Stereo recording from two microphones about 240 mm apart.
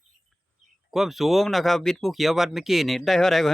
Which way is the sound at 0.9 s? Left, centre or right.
Centre.